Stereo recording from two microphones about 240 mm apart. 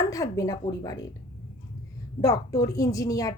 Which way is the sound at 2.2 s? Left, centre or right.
Centre.